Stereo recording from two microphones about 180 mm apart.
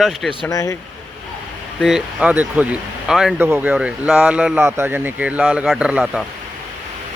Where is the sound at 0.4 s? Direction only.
20° left (ahead or behind).